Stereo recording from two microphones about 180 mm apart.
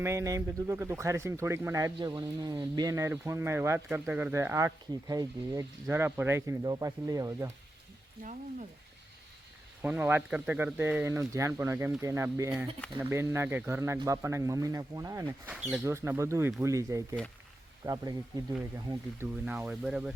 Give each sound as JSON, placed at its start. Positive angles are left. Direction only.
{"t": 0.0, "sound": "speech", "side_deg": -15}
{"t": 8.2, "sound": "speech", "side_deg": -45}
{"t": 9.8, "sound": "speech", "side_deg": -10}
{"t": 19.5, "sound": "speech", "side_deg": -5}